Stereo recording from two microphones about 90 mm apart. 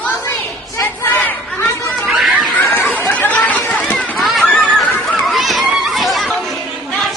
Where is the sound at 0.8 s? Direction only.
20° left (ahead or behind).